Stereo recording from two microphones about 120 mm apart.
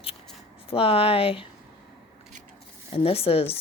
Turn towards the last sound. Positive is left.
turn(degrees=55)  # may be behind; listen again after turning